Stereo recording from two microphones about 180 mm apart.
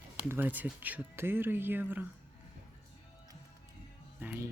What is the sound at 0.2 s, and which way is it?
Speech, 10° right (ahead or behind).